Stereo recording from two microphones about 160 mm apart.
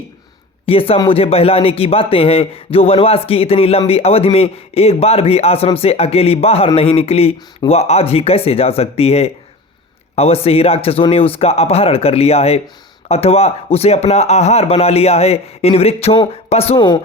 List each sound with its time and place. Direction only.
0.6 s speech: 35° left (ahead or behind)